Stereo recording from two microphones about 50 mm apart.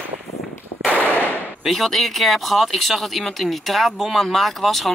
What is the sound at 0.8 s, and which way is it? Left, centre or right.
Firecracker, left.